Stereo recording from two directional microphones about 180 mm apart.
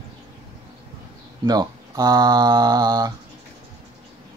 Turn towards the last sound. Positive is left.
turn(degrees=-20)  # may be behind; listen again after turning